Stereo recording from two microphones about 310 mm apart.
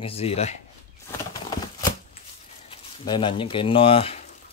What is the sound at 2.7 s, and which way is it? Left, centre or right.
Speech, centre.